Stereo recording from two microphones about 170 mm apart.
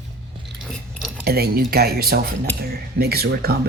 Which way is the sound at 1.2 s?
65° right (ahead or behind).